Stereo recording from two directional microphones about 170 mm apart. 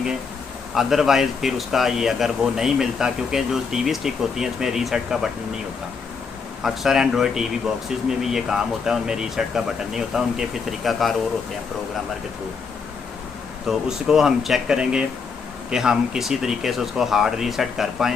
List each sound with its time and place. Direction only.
0.7 s speech: centre (ahead or behind)
6.6 s speech: centre (ahead or behind)
13.7 s speech: 5° right (ahead or behind)